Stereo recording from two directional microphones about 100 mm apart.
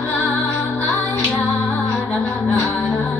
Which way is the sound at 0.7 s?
15° left (ahead or behind).